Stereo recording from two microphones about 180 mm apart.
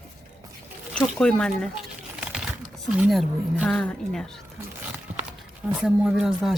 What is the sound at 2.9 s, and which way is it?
A woman's voice, 5° right (ahead or behind).